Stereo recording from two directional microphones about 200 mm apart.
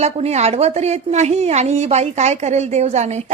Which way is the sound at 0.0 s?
35° right (ahead or behind).